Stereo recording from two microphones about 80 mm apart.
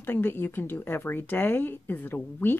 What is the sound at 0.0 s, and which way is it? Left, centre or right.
Speech, left.